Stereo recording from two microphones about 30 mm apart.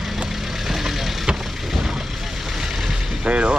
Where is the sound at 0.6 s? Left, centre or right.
Centre.